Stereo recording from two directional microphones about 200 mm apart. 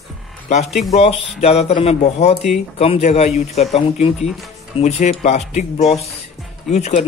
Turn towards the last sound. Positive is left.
turn(degrees=35)  # may be behind; listen again after turning